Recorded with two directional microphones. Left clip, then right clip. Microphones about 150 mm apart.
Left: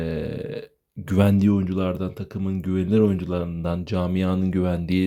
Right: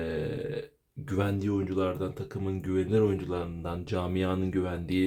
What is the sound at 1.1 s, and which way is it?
Speech, 60° left (ahead or behind).